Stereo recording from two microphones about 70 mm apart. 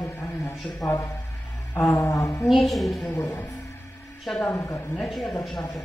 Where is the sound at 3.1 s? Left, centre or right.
Left.